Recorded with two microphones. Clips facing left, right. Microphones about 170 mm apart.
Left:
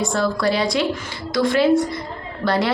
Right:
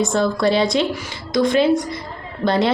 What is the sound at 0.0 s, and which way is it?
A woman's voice, 20° right (ahead or behind).